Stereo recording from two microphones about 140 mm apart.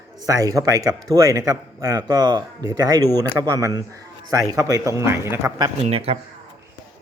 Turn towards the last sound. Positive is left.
turn(degrees=-45)  # may be behind; listen again after turning